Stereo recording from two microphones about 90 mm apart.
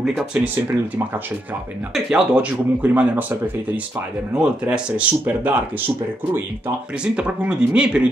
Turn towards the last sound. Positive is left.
turn(degrees=-10)  # may be behind; listen again after turning